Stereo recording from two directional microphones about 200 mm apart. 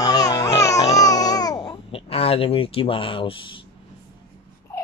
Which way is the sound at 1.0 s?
20° left (ahead or behind).